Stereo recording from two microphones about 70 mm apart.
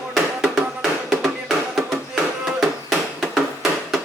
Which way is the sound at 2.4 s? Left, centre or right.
Centre.